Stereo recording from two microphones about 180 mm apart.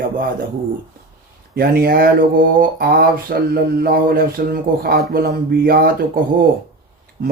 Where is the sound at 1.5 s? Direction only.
55° right (ahead or behind).